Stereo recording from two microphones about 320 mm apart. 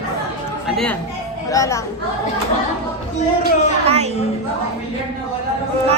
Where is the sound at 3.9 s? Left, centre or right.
Centre.